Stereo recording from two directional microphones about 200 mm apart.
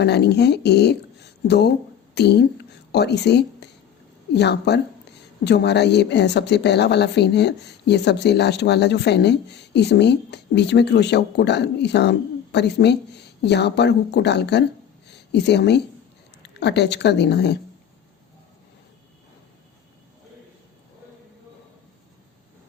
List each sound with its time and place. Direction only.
0.0 s speech: 55° left (ahead or behind)